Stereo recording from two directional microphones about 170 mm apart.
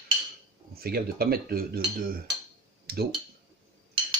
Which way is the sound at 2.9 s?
65° right (ahead or behind).